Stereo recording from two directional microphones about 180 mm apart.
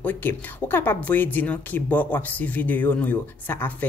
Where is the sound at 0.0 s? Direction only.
10° left (ahead or behind).